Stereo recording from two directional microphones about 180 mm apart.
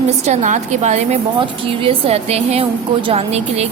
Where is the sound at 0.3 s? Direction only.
40° right (ahead or behind).